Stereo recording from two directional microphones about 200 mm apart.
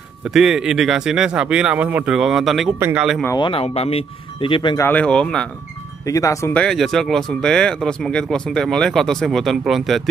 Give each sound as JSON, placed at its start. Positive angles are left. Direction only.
{"t": 0.3, "sound": "speech", "side_deg": -5}
{"t": 3.3, "sound": "speech", "side_deg": 25}
{"t": 4.8, "sound": "speech", "side_deg": 5}
{"t": 6.0, "sound": "speech", "side_deg": 15}